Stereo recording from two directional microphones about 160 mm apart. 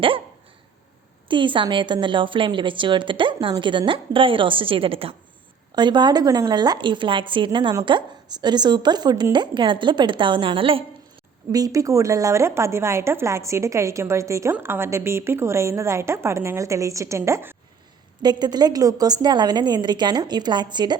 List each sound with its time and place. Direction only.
1.3 s a woman's voice: 30° right (ahead or behind)
11.5 s speech: 20° right (ahead or behind)
18.2 s speech: 25° right (ahead or behind)